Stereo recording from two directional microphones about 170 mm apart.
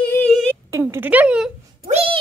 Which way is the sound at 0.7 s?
10° right (ahead or behind).